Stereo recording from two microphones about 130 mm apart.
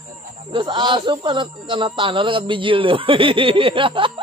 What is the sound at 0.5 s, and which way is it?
Speech, 40° right (ahead or behind).